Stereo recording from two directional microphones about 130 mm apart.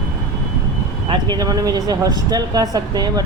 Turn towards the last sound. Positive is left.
turn(degrees=-30)  # may be behind; listen again after turning